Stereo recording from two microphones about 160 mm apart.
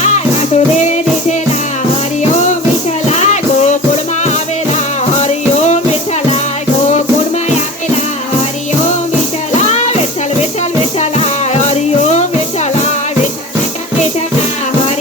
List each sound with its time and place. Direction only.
0.0 s music: 45° left (ahead or behind)
5.1 s music: 45° left (ahead or behind)
9.6 s music: 45° left (ahead or behind)
11.0 s music: 45° left (ahead or behind)